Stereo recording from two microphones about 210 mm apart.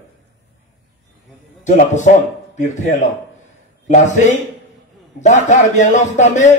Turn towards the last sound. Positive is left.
turn(degrees=35)  # may be behind; listen again after turning